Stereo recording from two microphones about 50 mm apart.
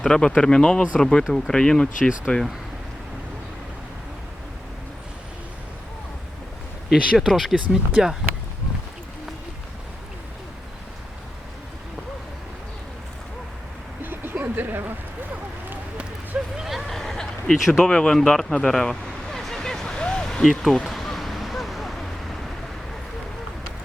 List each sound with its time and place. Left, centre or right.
0.0 s speech: centre
6.9 s speech: centre
14.0 s bird: right
16.6 s vehicle: centre
17.6 s speech: centre
17.8 s speech: centre
18.6 s a sound: centre